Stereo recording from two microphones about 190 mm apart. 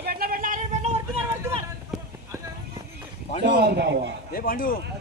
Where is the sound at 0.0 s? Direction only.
50° right (ahead or behind).